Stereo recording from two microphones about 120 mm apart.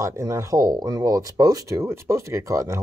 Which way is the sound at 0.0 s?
25° right (ahead or behind).